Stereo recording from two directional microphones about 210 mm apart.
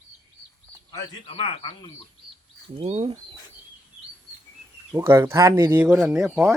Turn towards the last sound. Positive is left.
turn(degrees=-10)  # may be behind; listen again after turning